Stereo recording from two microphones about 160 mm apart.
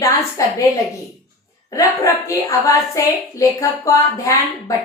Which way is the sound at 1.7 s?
20° left (ahead or behind).